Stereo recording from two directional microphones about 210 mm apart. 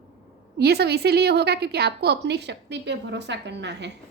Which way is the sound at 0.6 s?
50° right (ahead or behind).